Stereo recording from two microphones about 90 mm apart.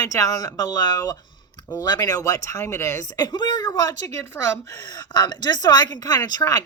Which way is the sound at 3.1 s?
45° left (ahead or behind).